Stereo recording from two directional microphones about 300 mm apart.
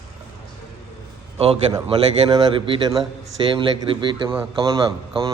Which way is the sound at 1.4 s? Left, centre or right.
Centre.